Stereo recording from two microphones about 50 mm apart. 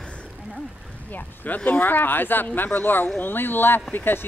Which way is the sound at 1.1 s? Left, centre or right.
Left.